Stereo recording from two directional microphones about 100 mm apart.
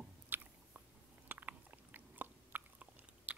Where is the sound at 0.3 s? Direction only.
20° right (ahead or behind).